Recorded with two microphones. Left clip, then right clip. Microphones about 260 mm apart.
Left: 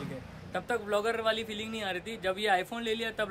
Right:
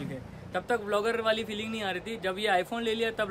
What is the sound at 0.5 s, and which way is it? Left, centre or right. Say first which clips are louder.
Speech: right 2 dB; centre.